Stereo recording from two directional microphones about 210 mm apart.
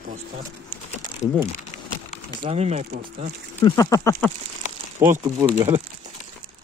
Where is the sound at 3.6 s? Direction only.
15° left (ahead or behind).